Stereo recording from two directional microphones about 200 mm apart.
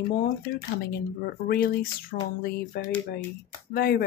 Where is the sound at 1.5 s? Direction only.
50° left (ahead or behind).